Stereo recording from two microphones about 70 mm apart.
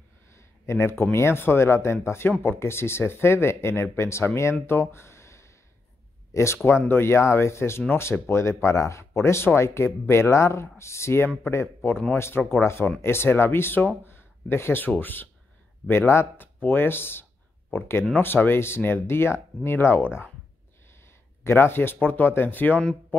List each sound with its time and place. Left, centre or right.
0.3 s a sound: left
1.1 s speech: left
21.5 s speech: left